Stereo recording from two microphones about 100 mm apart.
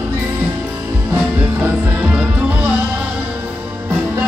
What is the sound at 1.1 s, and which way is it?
Music, 15° right (ahead or behind).